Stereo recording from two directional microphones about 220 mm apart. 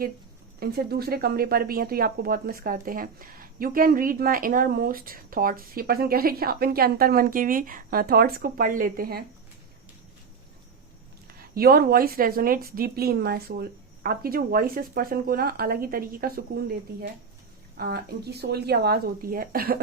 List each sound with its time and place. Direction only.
0.6 s speech: 45° right (ahead or behind)
11.3 s a woman's voice: 45° right (ahead or behind)